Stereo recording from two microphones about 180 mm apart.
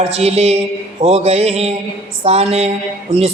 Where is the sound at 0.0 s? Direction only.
35° right (ahead or behind).